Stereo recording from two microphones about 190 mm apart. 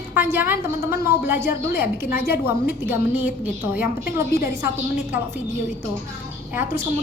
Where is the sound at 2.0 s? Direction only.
55° left (ahead or behind).